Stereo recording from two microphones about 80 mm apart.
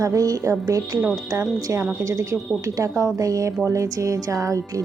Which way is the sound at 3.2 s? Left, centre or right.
Right.